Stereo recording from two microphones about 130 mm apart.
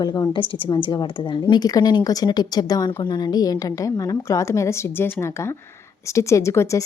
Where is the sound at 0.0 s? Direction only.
35° left (ahead or behind).